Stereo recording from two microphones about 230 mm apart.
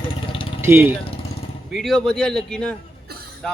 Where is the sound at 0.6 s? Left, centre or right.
Centre.